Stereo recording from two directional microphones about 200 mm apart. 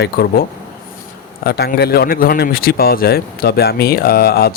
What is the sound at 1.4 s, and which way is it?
Speech, 50° left (ahead or behind).